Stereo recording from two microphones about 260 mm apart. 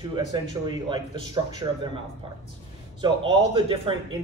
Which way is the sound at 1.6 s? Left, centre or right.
Centre.